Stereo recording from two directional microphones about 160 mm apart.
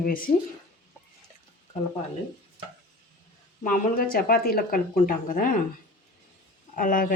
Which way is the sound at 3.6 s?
60° left (ahead or behind).